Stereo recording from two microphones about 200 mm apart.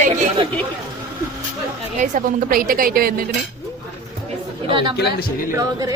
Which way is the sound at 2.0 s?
45° right (ahead or behind).